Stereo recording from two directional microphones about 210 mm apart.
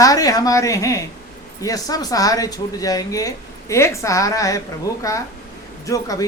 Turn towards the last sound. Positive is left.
turn(degrees=15)  # may be behind; listen again after turning